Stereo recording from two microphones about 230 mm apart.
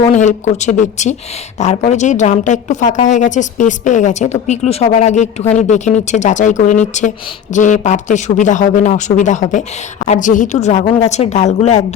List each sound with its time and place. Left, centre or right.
0.1 s a woman's voice: left